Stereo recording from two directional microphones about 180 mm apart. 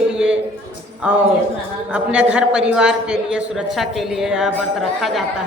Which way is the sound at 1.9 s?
5° right (ahead or behind).